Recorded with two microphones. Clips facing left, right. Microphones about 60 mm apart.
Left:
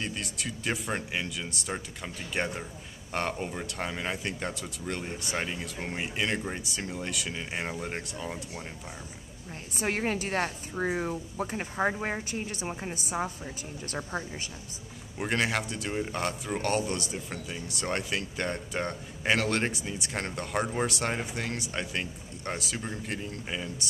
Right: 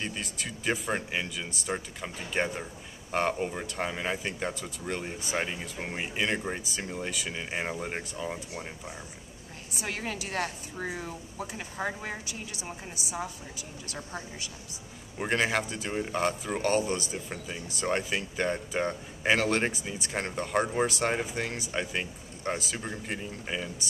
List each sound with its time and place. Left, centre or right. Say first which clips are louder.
0.0 s speech: left 1 dB; centre
9.8 s speech: left 5 dB; left
15.1 s speech: right 1 dB; centre